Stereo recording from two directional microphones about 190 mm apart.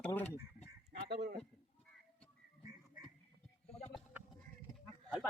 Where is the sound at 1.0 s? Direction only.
60° right (ahead or behind).